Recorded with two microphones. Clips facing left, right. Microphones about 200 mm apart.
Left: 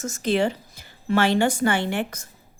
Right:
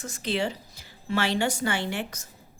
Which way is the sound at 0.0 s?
45° left (ahead or behind).